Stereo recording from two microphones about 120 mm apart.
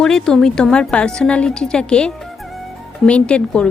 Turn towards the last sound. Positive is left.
turn(degrees=10)  # may be behind; listen again after turning